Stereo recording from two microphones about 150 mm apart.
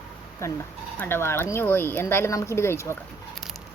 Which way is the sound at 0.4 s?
20° left (ahead or behind).